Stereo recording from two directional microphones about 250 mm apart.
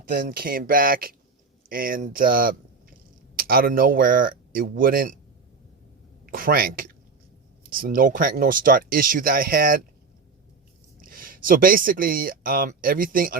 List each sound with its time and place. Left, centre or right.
0.1 s speech: right
6.3 s speech: right
11.0 s speech: right